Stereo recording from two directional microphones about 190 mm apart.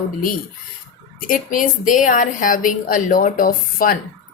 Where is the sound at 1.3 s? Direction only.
45° left (ahead or behind).